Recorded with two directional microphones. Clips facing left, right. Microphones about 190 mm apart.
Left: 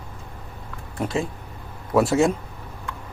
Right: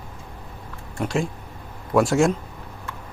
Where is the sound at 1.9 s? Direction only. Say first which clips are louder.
Even; centre (ahead or behind).